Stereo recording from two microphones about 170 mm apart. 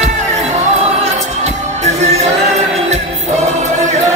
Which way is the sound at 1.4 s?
40° right (ahead or behind).